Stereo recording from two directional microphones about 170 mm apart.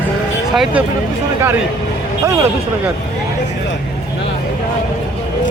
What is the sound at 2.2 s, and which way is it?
Speech, 15° right (ahead or behind).